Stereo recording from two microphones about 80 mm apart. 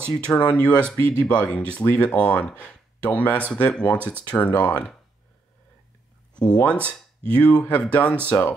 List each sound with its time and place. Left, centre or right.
0.2 s speech: centre
6.5 s speech: centre